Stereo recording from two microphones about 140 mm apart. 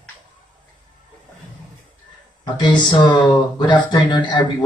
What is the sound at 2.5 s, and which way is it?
Speech, 30° left (ahead or behind).